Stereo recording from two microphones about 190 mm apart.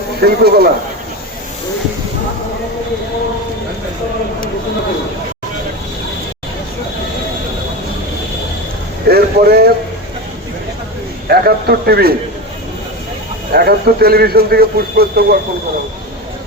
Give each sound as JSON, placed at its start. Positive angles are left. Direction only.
{"t": 0.2, "sound": "a man's voice", "side_deg": -55}
{"t": 9.0, "sound": "a man's voice", "side_deg": -55}
{"t": 11.3, "sound": "a man's voice", "side_deg": -55}
{"t": 13.5, "sound": "a man's voice", "side_deg": -55}